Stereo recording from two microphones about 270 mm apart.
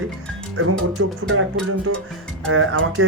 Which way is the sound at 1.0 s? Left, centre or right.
Right.